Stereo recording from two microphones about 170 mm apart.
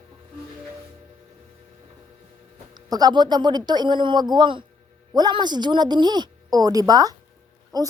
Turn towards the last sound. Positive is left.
turn(degrees=-20)  # may be behind; listen again after turning